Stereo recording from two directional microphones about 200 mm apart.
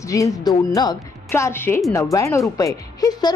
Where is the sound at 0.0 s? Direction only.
15° left (ahead or behind).